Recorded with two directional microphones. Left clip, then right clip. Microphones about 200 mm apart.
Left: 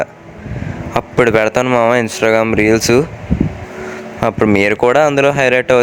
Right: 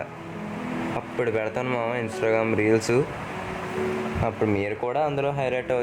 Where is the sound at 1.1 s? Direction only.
45° left (ahead or behind).